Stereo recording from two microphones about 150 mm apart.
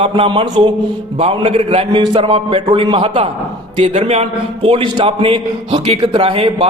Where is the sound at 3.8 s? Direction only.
50° right (ahead or behind).